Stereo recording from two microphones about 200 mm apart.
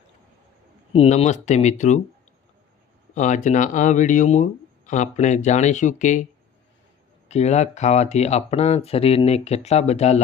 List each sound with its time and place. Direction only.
0.9 s speech: 30° left (ahead or behind)
3.2 s speech: 35° left (ahead or behind)
7.3 s speech: 35° left (ahead or behind)